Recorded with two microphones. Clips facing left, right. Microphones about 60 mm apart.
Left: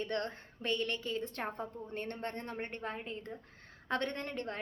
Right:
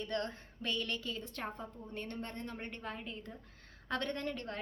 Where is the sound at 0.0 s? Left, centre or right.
Left.